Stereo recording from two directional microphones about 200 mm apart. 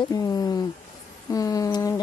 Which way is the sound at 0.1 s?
15° left (ahead or behind).